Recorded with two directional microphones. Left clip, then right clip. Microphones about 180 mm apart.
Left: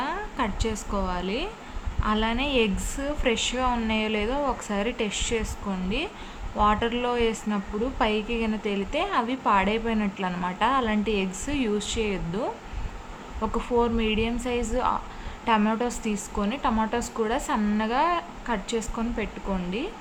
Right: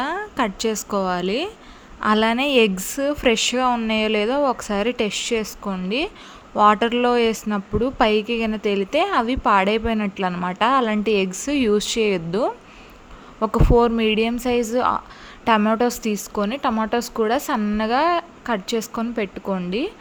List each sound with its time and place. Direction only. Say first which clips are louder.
0.0 s a woman's voice: right 5 dB; 40° right (ahead or behind)